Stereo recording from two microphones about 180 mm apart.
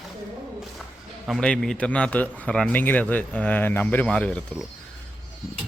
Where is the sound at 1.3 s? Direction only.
5° left (ahead or behind).